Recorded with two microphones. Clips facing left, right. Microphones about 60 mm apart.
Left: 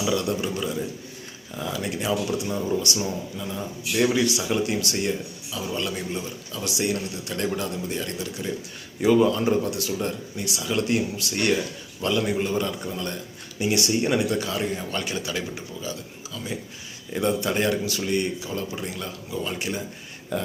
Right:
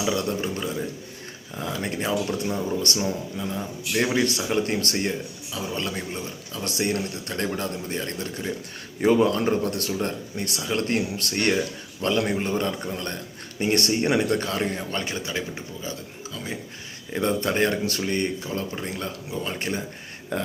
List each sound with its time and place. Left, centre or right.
0.0 s a man's voice: right